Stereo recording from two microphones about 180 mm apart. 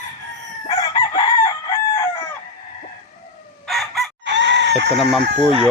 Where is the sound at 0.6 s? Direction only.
20° left (ahead or behind).